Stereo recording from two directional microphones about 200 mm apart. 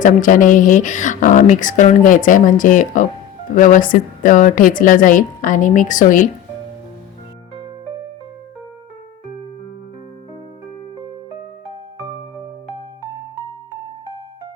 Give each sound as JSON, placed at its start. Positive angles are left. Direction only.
{"t": 0.0, "sound": "speech", "side_deg": 40}